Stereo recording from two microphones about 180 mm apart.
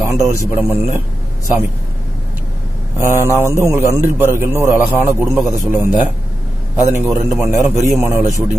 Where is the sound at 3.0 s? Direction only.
15° right (ahead or behind).